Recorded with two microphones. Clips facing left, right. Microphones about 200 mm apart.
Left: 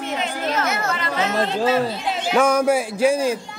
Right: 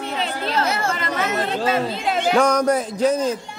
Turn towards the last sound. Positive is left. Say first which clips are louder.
# left 1 dB
turn(degrees=10)  # may be behind; listen again after turning